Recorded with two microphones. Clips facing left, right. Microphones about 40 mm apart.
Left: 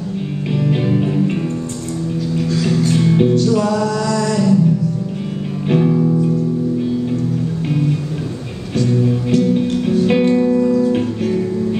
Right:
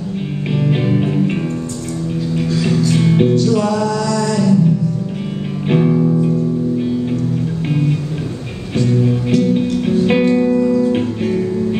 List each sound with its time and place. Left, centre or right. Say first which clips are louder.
0.5 s music: right 1 dB; right
2.9 s music: even; right
3.4 s music: even; centre
3.9 s a sound: even; centre
5.7 s music: right 1 dB; right
8.7 s music: right 1 dB; right